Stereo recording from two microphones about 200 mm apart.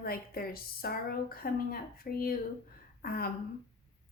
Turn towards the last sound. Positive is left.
turn(degrees=50)  # may be behind; listen again after turning